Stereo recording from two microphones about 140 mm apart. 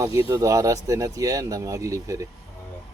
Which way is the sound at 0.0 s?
20° right (ahead or behind).